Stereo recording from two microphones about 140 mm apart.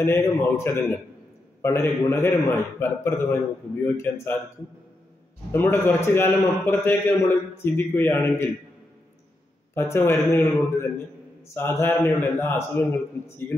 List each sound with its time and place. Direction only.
0.0 s a man's voice: 20° left (ahead or behind)
5.5 s a man's voice: 15° left (ahead or behind)
9.8 s a man's voice: 15° left (ahead or behind)